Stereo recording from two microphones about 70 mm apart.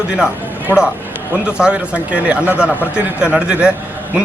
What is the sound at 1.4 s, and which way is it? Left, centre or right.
Speech, centre.